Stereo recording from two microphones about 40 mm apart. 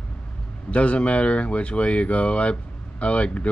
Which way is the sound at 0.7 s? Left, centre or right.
Left.